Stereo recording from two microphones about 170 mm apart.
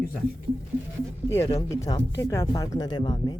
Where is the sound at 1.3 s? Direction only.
20° left (ahead or behind).